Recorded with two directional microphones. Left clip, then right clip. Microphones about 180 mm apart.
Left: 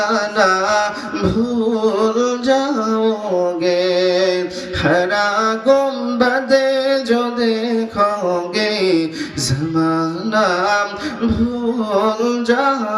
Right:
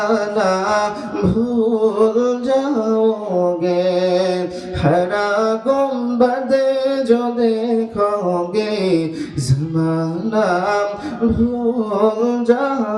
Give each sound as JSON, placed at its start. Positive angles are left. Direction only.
{"t": 0.0, "sound": "mantra", "side_deg": -50}
{"t": 1.8, "sound": "music", "side_deg": -50}
{"t": 3.6, "sound": "a sound", "side_deg": -50}
{"t": 4.8, "sound": "music", "side_deg": -50}
{"t": 8.8, "sound": "a sound", "side_deg": -50}
{"t": 9.7, "sound": "mantra", "side_deg": -25}
{"t": 10.3, "sound": "music", "side_deg": -50}
{"t": 12.0, "sound": "mantra", "side_deg": -45}